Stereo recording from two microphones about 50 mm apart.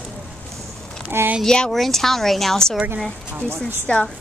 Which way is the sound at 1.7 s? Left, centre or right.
Centre.